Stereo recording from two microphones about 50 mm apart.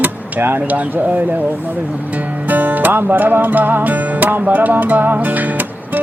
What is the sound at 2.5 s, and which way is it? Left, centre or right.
Music, right.